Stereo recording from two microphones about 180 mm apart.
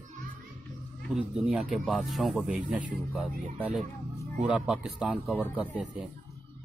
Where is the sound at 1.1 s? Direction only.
5° right (ahead or behind).